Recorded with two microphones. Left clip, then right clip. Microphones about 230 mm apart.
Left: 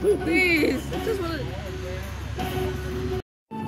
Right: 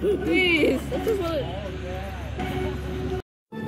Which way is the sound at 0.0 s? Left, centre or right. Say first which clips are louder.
Left 1 dB; centre.